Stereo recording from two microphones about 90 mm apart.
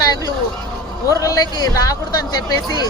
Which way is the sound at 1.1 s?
40° left (ahead or behind).